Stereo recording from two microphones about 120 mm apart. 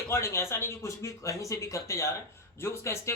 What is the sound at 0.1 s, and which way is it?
Speech, 20° left (ahead or behind).